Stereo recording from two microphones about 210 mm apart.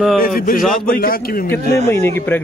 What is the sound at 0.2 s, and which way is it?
A man's voice, 45° left (ahead or behind).